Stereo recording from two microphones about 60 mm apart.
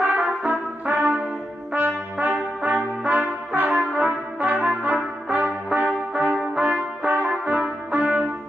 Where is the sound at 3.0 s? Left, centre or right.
Right.